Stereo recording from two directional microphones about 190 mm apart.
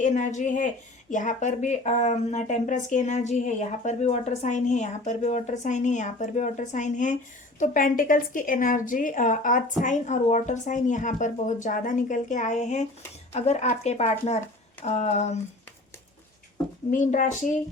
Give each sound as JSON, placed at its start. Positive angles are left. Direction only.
{"t": 0.0, "sound": "speech", "side_deg": 40}
{"t": 16.9, "sound": "speech", "side_deg": 40}